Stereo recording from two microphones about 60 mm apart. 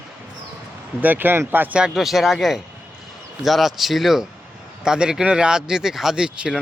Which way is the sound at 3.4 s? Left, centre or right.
Centre.